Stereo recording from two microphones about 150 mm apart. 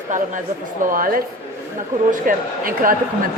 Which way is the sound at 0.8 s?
70° right (ahead or behind).